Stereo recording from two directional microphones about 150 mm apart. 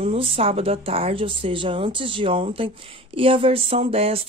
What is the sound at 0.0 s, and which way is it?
Speech, 40° right (ahead or behind).